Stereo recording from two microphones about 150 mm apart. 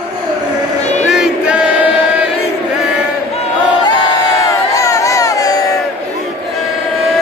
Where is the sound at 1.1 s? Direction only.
5° right (ahead or behind).